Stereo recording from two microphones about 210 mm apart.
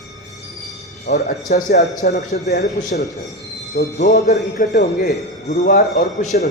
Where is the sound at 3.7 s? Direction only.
45° left (ahead or behind).